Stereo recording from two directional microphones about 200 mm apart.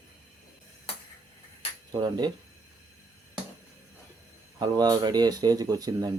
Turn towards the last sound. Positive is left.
turn(degrees=-20)  # may be behind; listen again after turning